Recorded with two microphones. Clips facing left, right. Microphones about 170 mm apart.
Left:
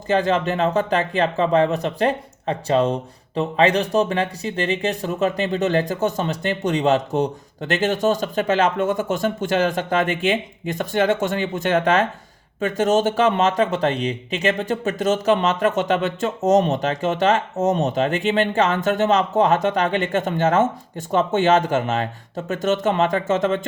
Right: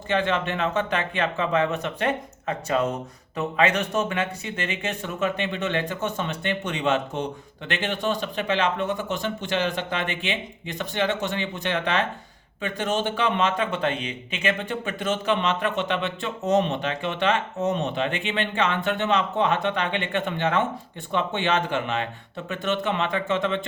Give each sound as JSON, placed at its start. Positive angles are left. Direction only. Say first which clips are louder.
{"t": 0.1, "sound": "speech", "louder": "left 5 dB", "side_deg": 40}